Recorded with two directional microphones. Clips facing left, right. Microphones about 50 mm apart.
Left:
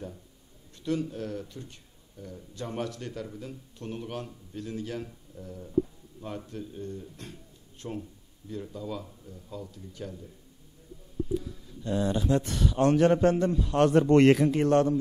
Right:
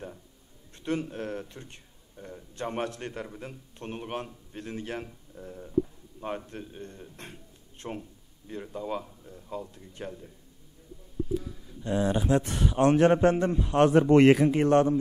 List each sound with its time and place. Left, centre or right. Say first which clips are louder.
0.7 s speech: even; right
11.8 s speech: right 1 dB; right